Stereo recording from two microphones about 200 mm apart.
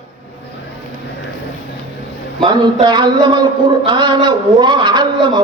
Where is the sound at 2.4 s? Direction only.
25° right (ahead or behind).